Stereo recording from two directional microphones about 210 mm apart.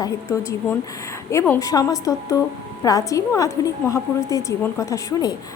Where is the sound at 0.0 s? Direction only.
15° left (ahead or behind).